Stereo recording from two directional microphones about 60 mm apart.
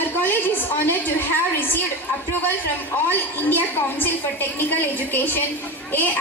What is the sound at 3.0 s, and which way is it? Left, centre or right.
A woman's voice, left.